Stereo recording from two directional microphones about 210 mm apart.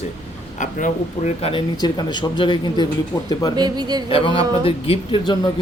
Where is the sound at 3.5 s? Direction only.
20° right (ahead or behind).